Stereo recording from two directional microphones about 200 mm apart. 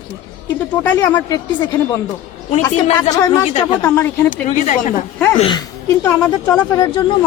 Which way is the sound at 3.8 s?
10° left (ahead or behind).